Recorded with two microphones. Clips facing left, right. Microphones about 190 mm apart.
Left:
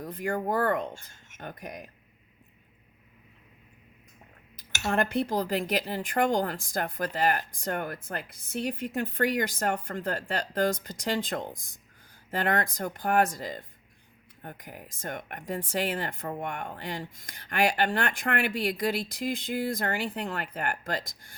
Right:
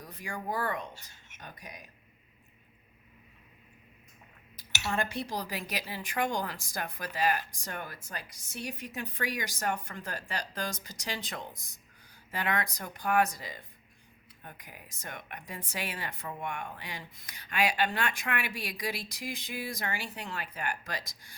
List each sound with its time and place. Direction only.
0.0 s speech: 55° left (ahead or behind)
4.7 s speech: 50° left (ahead or behind)
11.5 s speech: 90° left
12.3 s speech: 50° left (ahead or behind)